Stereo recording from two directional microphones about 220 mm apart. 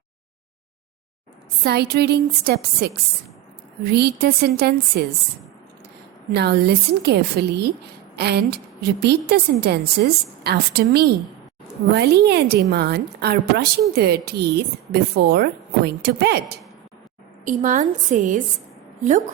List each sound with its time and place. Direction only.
1.6 s a woman's voice: 45° right (ahead or behind)
6.3 s a woman's voice: 50° right (ahead or behind)
17.4 s a woman's voice: 35° right (ahead or behind)